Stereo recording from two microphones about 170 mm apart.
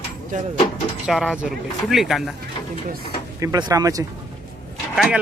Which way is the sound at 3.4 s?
20° right (ahead or behind).